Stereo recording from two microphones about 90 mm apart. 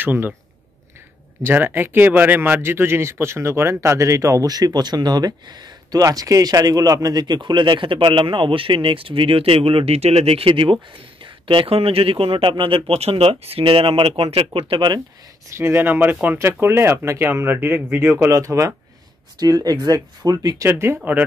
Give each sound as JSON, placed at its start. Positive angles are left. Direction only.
{"t": 0.0, "sound": "speech", "side_deg": -20}
{"t": 1.4, "sound": "speech", "side_deg": -20}
{"t": 11.4, "sound": "speech", "side_deg": -80}
{"t": 15.5, "sound": "speech", "side_deg": -25}
{"t": 18.3, "sound": "speech", "side_deg": -35}
{"t": 20.6, "sound": "speech", "side_deg": -25}